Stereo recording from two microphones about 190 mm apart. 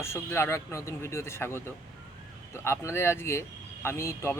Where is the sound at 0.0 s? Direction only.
15° left (ahead or behind).